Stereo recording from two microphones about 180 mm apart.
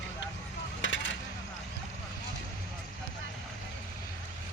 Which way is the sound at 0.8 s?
90° left.